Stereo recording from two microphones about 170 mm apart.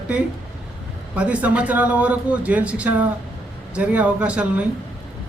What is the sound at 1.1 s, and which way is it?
A man's voice, 5° right (ahead or behind).